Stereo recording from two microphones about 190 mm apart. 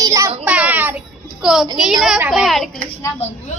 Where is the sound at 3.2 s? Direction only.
35° left (ahead or behind).